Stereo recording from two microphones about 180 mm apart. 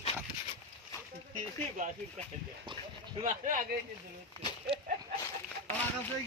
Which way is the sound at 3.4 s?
45° right (ahead or behind).